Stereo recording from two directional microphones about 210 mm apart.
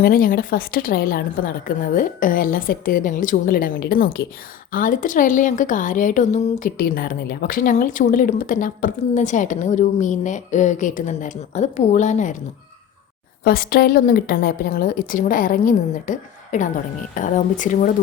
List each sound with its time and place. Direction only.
0.0 s a woman's voice: 45° left (ahead or behind)
13.4 s a woman's voice: 45° left (ahead or behind)